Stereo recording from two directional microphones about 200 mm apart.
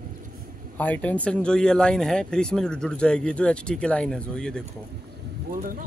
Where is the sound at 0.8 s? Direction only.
10° left (ahead or behind).